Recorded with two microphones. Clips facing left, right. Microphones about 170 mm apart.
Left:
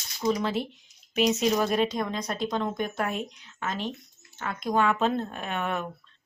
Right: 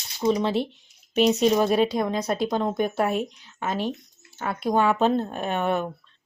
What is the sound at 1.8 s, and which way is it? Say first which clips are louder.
Speech: right 5 dB; 35° right (ahead or behind).